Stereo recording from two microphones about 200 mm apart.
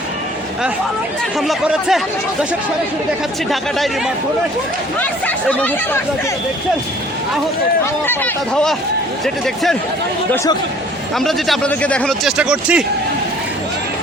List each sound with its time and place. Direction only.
1.4 s speech: centre (ahead or behind)
4.9 s speech: 5° left (ahead or behind)
8.0 s speech: 5° left (ahead or behind)
10.3 s speech: 15° left (ahead or behind)
11.2 s speech: centre (ahead or behind)